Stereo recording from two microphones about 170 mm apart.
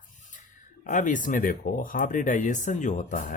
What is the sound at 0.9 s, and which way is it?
Speech, 50° left (ahead or behind).